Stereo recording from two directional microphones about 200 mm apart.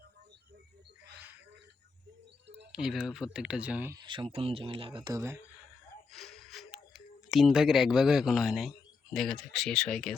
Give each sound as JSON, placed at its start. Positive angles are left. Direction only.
{"t": 2.7, "sound": "speech", "side_deg": 0}
{"t": 4.0, "sound": "speech", "side_deg": -25}
{"t": 6.1, "sound": "speech", "side_deg": 0}